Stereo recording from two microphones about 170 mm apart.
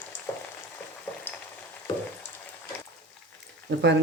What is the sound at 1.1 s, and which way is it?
Frying, 15° left (ahead or behind).